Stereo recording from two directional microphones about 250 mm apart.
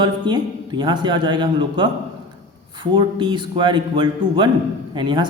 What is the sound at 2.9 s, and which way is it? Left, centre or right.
A man's voice, centre.